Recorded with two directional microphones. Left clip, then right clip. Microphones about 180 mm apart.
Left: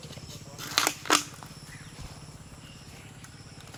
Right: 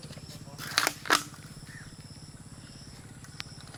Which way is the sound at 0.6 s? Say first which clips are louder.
Left 1 dB; 45° left (ahead or behind).